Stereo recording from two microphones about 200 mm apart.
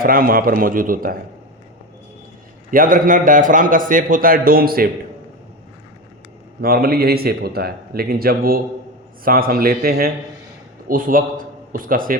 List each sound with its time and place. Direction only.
0.0 s a man's voice: 45° right (ahead or behind)
2.6 s a man's voice: 45° right (ahead or behind)
6.6 s a man's voice: 50° right (ahead or behind)